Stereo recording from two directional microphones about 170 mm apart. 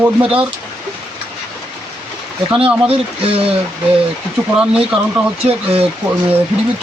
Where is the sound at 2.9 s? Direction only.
35° right (ahead or behind).